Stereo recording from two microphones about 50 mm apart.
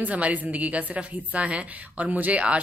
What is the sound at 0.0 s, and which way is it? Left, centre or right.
A woman's voice, right.